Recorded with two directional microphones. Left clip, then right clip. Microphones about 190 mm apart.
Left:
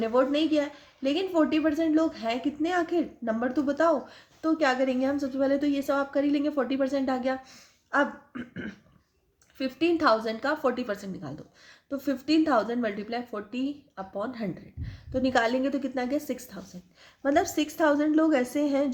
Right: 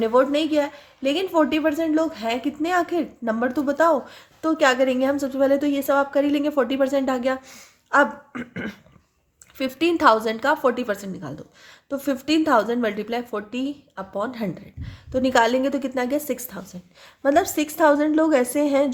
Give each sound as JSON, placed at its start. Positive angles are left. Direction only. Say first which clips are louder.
{"t": 0.0, "sound": "a woman's voice", "louder": "right 6 dB", "side_deg": -20}